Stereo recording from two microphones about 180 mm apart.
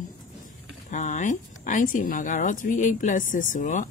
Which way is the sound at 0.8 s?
45° left (ahead or behind).